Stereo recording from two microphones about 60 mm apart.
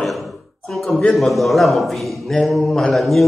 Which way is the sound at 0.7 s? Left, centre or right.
Centre.